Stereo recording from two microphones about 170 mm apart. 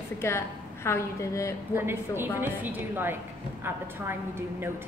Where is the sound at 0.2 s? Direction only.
15° left (ahead or behind).